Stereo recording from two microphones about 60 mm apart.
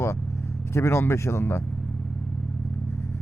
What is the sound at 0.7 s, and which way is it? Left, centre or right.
Speech, left.